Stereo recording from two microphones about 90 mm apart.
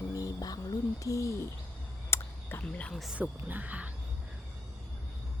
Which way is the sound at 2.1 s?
25° left (ahead or behind).